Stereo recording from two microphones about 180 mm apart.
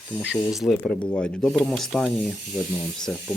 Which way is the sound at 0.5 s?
Centre (ahead or behind).